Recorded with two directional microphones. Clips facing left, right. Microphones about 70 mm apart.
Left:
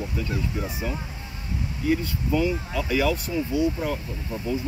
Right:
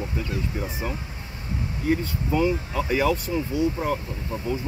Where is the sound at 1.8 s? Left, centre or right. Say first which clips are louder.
Even; right.